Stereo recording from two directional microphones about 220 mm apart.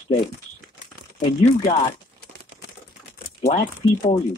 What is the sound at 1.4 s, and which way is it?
Speech, 30° left (ahead or behind).